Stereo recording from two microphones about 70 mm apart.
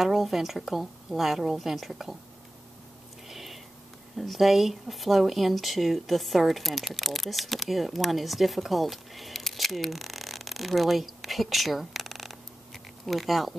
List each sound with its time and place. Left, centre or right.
0.0 s a woman's voice: centre
3.3 s a sound: centre
4.2 s speech: centre